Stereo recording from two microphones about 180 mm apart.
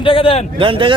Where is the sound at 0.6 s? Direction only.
30° right (ahead or behind).